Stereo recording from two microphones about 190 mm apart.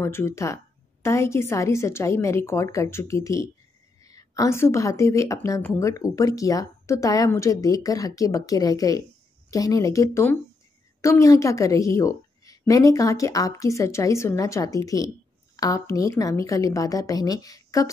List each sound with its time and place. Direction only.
0.0 s a woman's voice: 15° left (ahead or behind)